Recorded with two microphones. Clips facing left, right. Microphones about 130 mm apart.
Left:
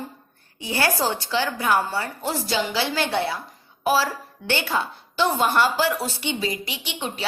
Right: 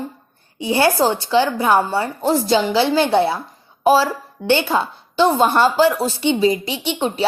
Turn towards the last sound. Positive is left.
turn(degrees=-30)  # may be behind; listen again after turning